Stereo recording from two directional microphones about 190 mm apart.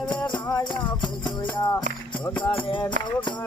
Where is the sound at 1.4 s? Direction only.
15° left (ahead or behind).